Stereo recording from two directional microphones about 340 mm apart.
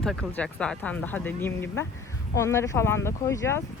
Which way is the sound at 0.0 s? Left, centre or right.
Centre.